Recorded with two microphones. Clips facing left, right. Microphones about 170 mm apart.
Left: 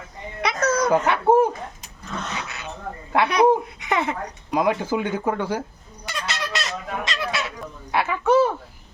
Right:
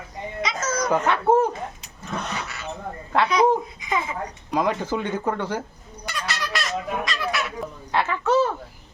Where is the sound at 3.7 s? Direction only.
70° left (ahead or behind).